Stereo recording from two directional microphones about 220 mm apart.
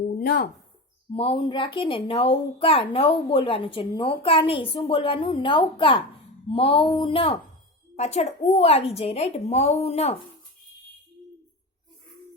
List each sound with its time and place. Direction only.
0.2 s speech: 45° left (ahead or behind)
1.1 s speech: 25° left (ahead or behind)